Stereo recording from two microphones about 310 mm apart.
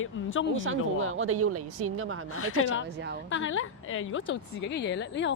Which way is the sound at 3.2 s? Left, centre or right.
Left.